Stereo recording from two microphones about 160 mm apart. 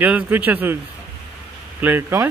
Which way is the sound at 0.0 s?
10° right (ahead or behind).